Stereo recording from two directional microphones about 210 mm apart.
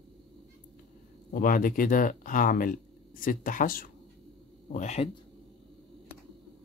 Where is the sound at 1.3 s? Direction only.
40° left (ahead or behind).